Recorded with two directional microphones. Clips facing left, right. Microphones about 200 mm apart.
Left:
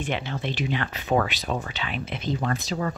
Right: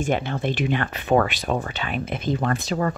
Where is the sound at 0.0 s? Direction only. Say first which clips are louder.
Right 5 dB; 50° right (ahead or behind).